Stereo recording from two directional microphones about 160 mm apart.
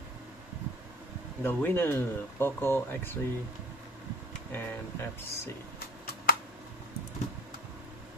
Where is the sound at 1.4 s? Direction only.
10° left (ahead or behind).